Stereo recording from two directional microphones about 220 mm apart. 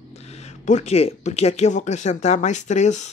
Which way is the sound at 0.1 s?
30° left (ahead or behind).